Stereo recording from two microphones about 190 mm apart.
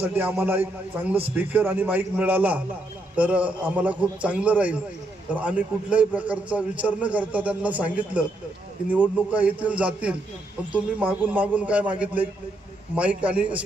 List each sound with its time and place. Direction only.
0.0 s a man's voice: 10° right (ahead or behind)